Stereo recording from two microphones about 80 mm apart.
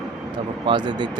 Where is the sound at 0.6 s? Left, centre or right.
Right.